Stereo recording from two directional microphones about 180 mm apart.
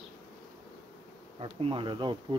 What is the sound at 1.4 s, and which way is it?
Speech, 30° right (ahead or behind).